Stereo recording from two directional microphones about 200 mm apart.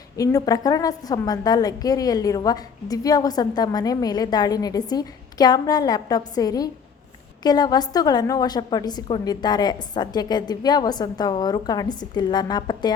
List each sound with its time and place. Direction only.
0.2 s a woman's voice: 15° left (ahead or behind)